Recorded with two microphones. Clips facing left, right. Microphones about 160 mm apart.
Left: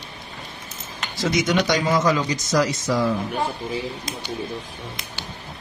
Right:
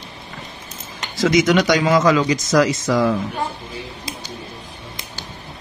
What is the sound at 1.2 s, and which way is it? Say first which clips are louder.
Speech: right 6 dB; 90° right.